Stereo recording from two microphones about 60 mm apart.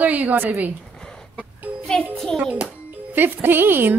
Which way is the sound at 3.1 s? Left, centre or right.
Right.